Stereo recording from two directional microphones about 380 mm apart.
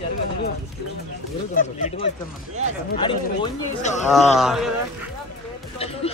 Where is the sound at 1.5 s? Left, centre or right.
Centre.